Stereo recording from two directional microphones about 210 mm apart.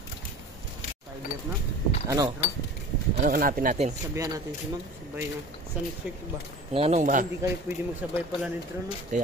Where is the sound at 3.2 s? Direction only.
40° right (ahead or behind).